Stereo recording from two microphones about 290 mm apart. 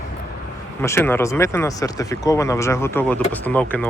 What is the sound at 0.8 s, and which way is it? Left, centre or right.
Speech, centre.